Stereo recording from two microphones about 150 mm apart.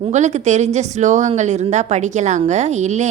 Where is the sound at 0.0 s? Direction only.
50° right (ahead or behind).